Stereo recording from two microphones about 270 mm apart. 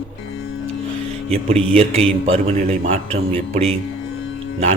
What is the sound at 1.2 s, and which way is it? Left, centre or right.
Speech, right.